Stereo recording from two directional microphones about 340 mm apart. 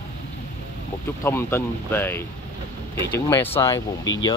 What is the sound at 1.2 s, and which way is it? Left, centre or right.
Speech, centre.